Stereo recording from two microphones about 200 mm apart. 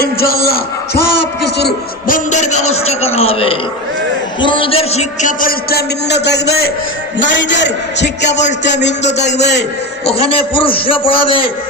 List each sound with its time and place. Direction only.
0.0 s a man's voice: 50° left (ahead or behind)
9.0 s a man's voice: 35° left (ahead or behind)